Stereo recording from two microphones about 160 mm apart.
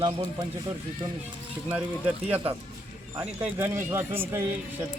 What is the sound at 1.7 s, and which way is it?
A man's voice, 10° right (ahead or behind).